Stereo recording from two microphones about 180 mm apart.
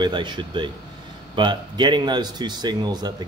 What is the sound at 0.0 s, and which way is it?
Speech, 25° right (ahead or behind).